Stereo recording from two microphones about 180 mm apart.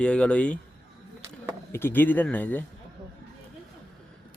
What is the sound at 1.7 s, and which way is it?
Speech, 10° left (ahead or behind).